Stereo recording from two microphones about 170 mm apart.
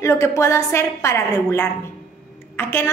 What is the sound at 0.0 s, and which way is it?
A woman's voice, 15° left (ahead or behind).